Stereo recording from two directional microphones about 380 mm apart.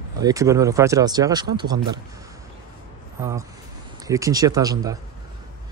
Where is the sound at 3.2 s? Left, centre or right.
Centre.